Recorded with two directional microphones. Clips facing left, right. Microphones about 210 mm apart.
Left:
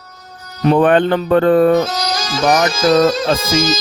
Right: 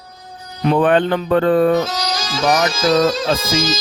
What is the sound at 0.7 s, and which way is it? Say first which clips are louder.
Speech: left 2 dB; 50° left (ahead or behind).